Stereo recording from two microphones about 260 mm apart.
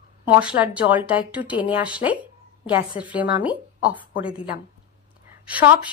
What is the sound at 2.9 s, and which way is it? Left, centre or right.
Speech, centre.